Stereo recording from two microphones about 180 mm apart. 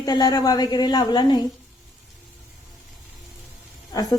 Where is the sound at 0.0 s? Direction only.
20° left (ahead or behind).